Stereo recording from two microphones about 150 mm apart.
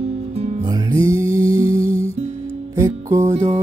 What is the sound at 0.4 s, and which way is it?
Music, 50° right (ahead or behind).